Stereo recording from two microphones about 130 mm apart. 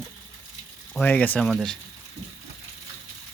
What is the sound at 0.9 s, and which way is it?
Speech, 10° left (ahead or behind).